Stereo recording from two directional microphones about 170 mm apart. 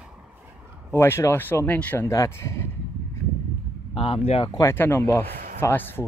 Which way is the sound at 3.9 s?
35° left (ahead or behind).